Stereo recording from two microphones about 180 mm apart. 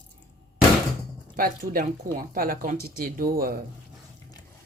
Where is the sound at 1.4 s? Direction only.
55° right (ahead or behind).